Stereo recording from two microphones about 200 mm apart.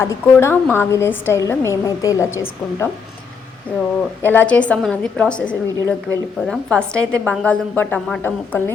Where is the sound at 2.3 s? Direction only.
85° left.